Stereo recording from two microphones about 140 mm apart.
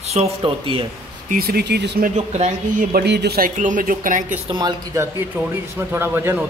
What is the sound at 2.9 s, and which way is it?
Speech, 85° right.